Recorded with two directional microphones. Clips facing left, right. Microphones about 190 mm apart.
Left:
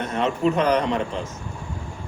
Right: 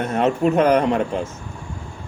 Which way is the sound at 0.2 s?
50° right (ahead or behind).